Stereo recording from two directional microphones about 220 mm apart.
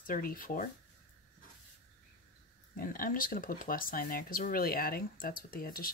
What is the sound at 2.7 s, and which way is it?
Speech, 40° left (ahead or behind).